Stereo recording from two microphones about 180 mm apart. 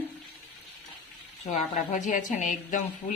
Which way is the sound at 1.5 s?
45° left (ahead or behind).